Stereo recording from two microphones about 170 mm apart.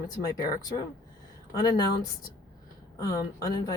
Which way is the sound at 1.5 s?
25° left (ahead or behind).